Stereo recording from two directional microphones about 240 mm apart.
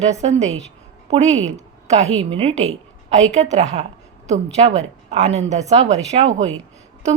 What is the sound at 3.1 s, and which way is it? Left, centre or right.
A woman's voice, right.